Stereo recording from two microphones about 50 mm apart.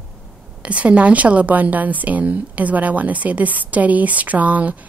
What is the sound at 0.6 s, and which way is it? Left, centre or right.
A woman's voice, right.